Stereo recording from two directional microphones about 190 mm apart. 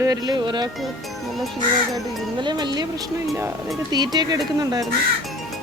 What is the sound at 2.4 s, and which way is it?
Speech, 25° right (ahead or behind).